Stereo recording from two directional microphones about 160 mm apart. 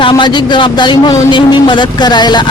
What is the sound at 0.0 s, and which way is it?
A man's voice, 30° left (ahead or behind).